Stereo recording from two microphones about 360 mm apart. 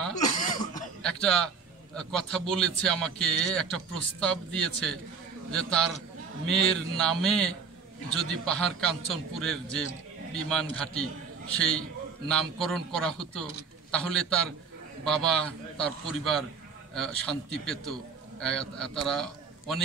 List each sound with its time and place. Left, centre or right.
0.0 s cough: centre
0.3 s cough: left
1.0 s a sound: centre
2.0 s speech: centre
7.0 s a man's voice: centre